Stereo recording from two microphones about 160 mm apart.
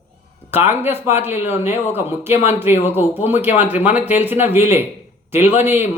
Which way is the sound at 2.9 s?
15° right (ahead or behind).